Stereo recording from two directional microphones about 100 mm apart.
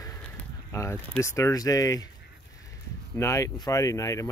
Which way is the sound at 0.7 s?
30° left (ahead or behind).